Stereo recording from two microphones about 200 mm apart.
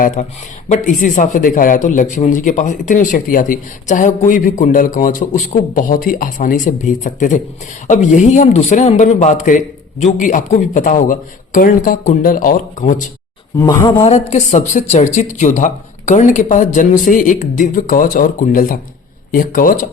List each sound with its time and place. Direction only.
0.2 s a man's voice: 40° left (ahead or behind)
13.6 s a man's voice: 15° left (ahead or behind); by 19.8 s 45° left (ahead or behind)